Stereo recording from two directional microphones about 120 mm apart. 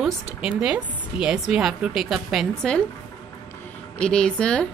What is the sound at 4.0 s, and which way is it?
Speech, 10° left (ahead or behind).